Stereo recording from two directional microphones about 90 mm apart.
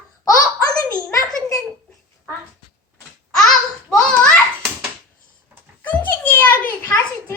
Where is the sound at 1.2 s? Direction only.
40° right (ahead or behind).